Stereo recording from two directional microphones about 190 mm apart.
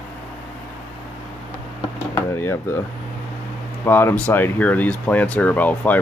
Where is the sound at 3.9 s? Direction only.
10° left (ahead or behind).